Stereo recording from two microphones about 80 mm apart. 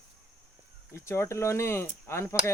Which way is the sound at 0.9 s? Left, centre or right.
Left.